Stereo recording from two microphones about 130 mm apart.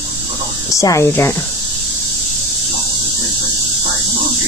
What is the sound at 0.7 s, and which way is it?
Speech, 25° left (ahead or behind).